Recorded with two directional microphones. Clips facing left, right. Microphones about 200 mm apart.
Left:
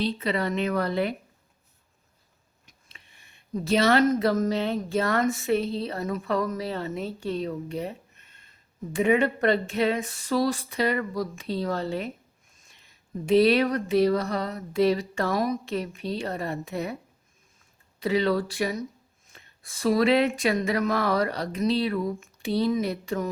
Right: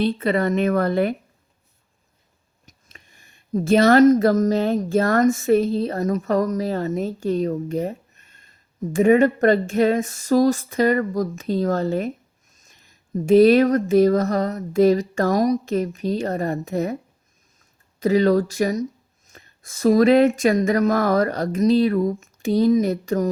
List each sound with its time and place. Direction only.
0.0 s speech: 50° right (ahead or behind)
2.6 s speech: 45° right (ahead or behind)